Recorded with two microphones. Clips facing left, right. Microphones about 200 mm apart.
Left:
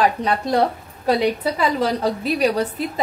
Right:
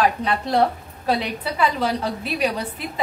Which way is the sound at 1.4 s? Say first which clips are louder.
Left 2 dB; 40° left (ahead or behind).